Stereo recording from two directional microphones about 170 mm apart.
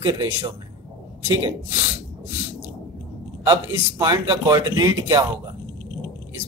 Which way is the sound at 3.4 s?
25° right (ahead or behind).